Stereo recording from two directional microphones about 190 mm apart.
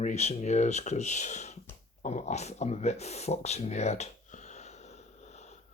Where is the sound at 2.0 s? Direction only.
35° left (ahead or behind).